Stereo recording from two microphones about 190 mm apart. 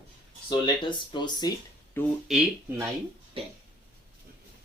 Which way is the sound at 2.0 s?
10° left (ahead or behind).